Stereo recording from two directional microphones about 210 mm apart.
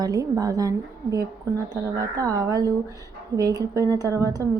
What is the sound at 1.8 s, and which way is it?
A woman's voice, 15° right (ahead or behind).